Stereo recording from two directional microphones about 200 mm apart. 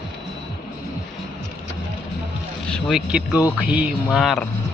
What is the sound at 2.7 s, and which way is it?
Speech, centre (ahead or behind).